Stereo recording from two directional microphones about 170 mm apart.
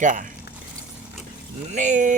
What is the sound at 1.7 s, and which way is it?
Speech, 45° right (ahead or behind).